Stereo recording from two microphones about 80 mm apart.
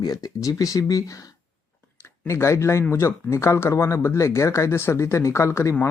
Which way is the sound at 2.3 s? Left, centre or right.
Left.